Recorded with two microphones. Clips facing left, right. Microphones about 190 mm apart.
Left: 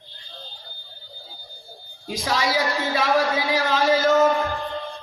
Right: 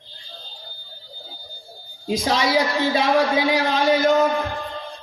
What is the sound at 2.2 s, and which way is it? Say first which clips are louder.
Speech: right 2 dB; 20° right (ahead or behind).